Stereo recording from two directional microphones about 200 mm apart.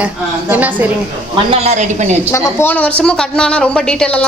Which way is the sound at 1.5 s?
35° right (ahead or behind).